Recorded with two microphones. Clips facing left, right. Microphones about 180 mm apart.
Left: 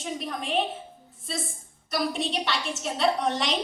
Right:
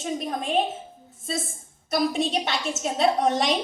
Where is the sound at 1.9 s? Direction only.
45° right (ahead or behind).